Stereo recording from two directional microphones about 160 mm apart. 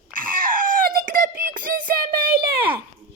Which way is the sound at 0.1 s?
60° right (ahead or behind).